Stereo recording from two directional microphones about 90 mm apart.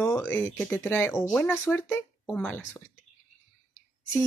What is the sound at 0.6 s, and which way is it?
Speech, 20° left (ahead or behind).